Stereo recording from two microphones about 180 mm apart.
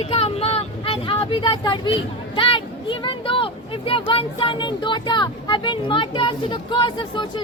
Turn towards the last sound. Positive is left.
turn(degrees=25)  # may be behind; listen again after turning